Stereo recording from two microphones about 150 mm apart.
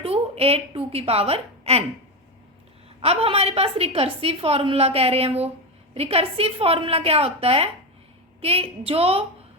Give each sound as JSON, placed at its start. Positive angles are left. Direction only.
{"t": 0.0, "sound": "a woman's voice", "side_deg": -40}
{"t": 3.0, "sound": "a woman's voice", "side_deg": -40}